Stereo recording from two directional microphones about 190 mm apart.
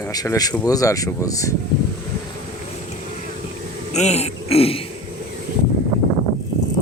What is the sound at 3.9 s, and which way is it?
Speech, 35° left (ahead or behind).